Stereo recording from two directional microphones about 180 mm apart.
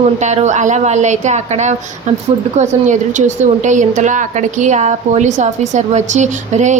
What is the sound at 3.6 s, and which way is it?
A woman's voice, 45° right (ahead or behind).